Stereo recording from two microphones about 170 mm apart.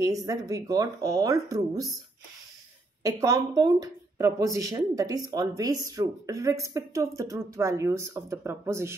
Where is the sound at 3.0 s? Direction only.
20° right (ahead or behind).